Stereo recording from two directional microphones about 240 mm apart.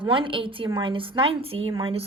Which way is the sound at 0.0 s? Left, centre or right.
Right.